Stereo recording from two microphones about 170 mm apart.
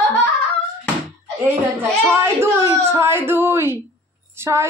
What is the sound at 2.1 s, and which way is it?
Speech, 15° right (ahead or behind).